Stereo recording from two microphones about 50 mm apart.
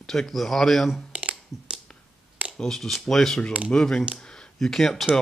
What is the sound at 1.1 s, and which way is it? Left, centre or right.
Computer keyboard, right.